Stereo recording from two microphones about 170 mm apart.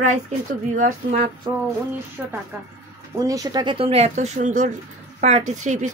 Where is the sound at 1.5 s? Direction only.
25° right (ahead or behind).